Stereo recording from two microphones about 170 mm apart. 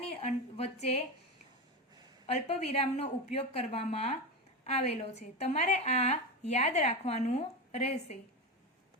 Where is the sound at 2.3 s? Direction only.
40° left (ahead or behind).